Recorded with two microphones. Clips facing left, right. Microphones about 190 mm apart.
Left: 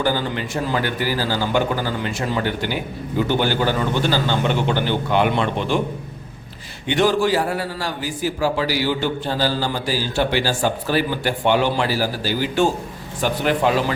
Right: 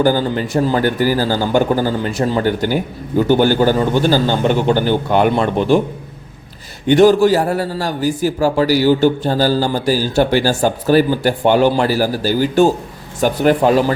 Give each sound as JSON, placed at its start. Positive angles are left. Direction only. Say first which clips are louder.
{"t": 0.0, "sound": "a man's voice", "louder": "right 7 dB", "side_deg": -40}
{"t": 6.8, "sound": "a man's voice", "louder": "right 8 dB", "side_deg": -45}